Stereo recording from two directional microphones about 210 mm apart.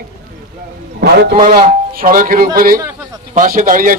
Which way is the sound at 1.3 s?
35° right (ahead or behind).